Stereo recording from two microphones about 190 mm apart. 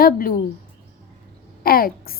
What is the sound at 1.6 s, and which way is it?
Speech, 50° left (ahead or behind).